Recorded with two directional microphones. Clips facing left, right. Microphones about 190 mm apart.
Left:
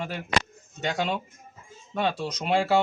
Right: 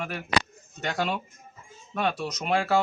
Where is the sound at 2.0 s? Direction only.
25° left (ahead or behind).